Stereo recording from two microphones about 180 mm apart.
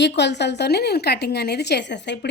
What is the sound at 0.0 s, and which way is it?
A woman's voice, 75° left (ahead or behind).